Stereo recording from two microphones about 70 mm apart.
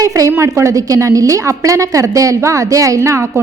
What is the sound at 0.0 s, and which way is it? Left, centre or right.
A woman's voice, right.